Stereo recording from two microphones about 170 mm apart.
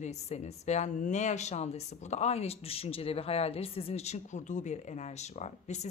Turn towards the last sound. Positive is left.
turn(degrees=40)  # may be behind; listen again after turning